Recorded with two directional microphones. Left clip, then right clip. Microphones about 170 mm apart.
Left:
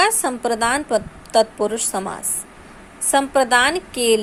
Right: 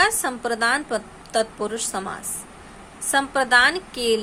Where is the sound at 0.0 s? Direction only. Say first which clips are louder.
Left 3 dB; 25° left (ahead or behind).